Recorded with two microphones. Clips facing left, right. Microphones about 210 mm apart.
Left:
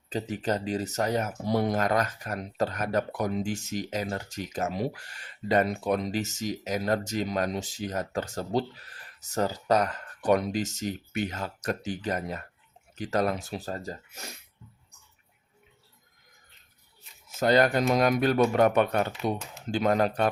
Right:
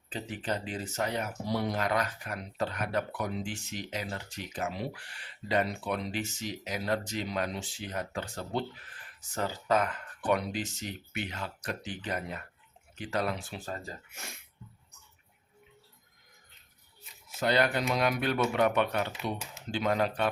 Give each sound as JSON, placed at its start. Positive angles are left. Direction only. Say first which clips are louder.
{"t": 0.1, "sound": "speech", "louder": "left 6 dB", "side_deg": 40}
{"t": 17.2, "sound": "speech", "louder": "left 5 dB", "side_deg": 45}